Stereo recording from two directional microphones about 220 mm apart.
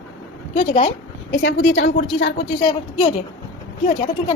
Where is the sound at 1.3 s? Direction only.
55° left (ahead or behind).